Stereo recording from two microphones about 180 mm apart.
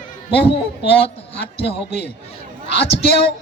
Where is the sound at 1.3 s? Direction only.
70° left (ahead or behind).